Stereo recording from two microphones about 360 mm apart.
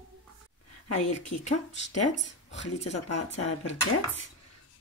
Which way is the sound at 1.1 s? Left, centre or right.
Centre.